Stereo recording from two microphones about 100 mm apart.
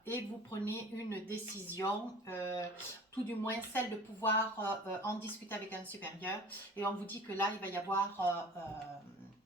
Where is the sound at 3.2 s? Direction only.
20° left (ahead or behind).